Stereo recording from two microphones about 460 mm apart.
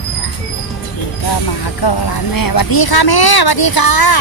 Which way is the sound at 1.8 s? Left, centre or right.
Left.